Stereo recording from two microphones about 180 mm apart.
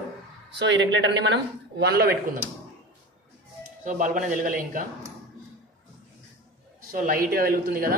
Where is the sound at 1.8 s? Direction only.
65° right (ahead or behind).